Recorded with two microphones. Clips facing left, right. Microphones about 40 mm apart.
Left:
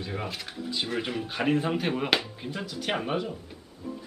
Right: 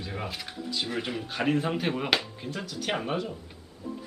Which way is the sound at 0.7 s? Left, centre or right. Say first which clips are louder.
Left 1 dB; centre.